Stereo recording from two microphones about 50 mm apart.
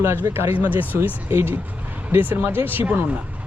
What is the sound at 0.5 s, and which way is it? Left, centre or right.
Speech, right.